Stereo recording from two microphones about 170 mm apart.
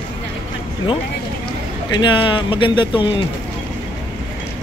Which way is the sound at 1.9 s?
30° left (ahead or behind).